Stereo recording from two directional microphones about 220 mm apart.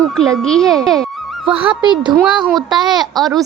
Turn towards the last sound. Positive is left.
turn(degrees=0)  # may be behind; listen again after turning